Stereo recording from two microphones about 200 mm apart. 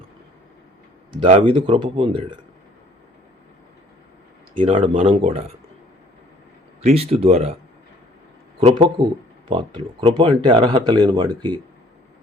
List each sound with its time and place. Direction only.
1.1 s speech: 30° right (ahead or behind)
4.6 s speech: 25° right (ahead or behind)
6.8 s speech: 30° right (ahead or behind)
8.6 s speech: 30° right (ahead or behind)